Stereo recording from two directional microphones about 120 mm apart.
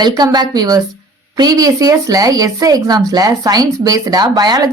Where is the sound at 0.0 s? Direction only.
35° right (ahead or behind).